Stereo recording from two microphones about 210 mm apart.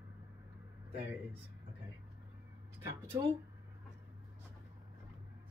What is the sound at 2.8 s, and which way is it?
Speech, 10° right (ahead or behind).